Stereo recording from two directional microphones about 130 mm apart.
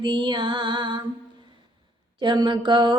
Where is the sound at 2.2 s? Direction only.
35° right (ahead or behind).